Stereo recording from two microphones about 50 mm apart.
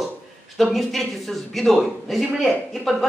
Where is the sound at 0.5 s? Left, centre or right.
Centre.